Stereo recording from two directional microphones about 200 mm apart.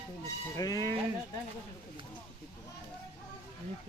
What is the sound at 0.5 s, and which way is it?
Speech, 15° left (ahead or behind).